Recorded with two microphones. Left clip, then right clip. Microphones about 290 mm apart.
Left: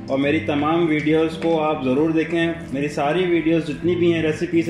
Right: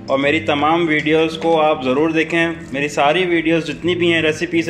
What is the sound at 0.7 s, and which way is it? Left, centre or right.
Speech, right.